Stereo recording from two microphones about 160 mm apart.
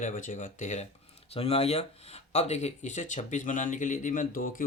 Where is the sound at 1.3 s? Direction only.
40° left (ahead or behind).